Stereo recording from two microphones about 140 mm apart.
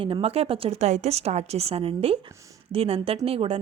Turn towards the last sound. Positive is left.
turn(degrees=-45)  # may be behind; listen again after turning